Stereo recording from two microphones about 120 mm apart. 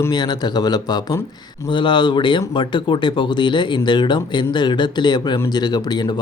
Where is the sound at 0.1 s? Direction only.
35° left (ahead or behind).